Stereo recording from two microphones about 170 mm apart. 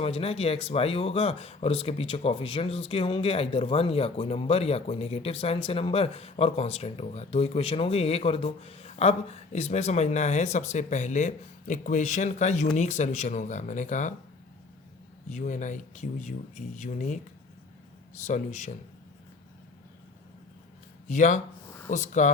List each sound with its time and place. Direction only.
0.0 s speech: 35° left (ahead or behind)
15.3 s speech: 45° left (ahead or behind)
21.1 s speech: 45° left (ahead or behind)